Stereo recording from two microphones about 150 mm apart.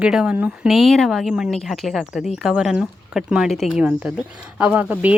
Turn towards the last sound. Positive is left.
turn(degrees=-10)  # may be behind; listen again after turning